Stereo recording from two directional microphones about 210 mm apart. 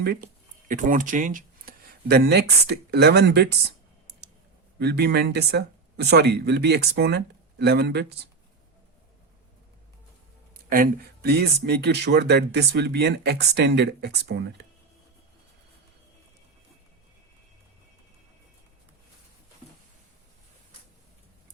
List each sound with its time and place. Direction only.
0.0 s speech: 50° right (ahead or behind)
0.7 s speech: 40° right (ahead or behind)
4.8 s speech: 50° right (ahead or behind)
10.7 s speech: 45° right (ahead or behind)